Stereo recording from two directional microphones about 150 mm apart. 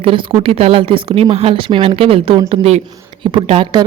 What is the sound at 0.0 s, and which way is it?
Speech, 35° right (ahead or behind).